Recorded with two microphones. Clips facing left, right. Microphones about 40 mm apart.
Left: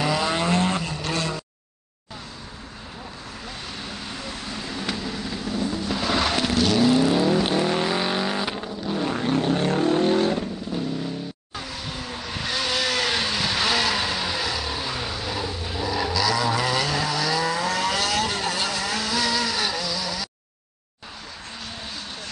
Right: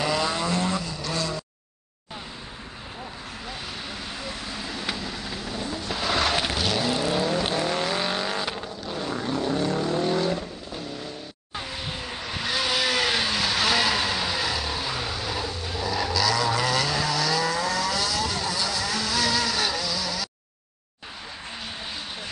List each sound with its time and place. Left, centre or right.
0.0 s vehicle: centre
0.3 s vehicle: left
3.9 s vehicle: centre
9.0 s vehicle: left
9.3 s vehicle: left
12.1 s vehicle: centre
17.7 s vehicle: left
18.0 s vehicle: left
18.9 s vehicle: centre